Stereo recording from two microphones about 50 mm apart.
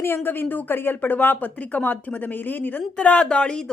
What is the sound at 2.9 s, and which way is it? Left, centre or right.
Speech, centre.